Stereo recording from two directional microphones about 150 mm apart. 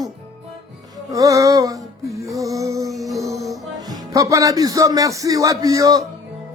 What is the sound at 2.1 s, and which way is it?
Music, 20° right (ahead or behind).